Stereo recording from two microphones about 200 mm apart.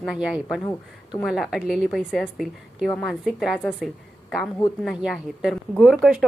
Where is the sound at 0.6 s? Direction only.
20° left (ahead or behind).